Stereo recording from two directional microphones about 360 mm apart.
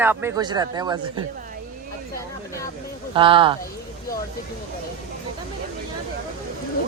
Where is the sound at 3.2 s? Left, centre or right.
Centre.